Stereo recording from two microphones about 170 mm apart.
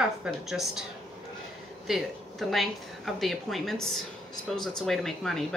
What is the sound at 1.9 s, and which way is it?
A woman's voice, centre (ahead or behind).